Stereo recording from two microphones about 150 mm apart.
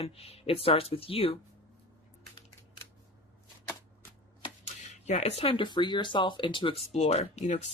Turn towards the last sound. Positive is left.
turn(degrees=45)  # may be behind; listen again after turning